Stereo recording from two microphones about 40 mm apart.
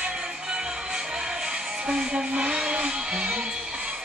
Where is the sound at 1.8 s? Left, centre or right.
Right.